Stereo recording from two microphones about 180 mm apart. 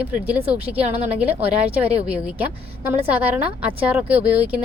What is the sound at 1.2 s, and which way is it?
A woman's voice, 10° right (ahead or behind).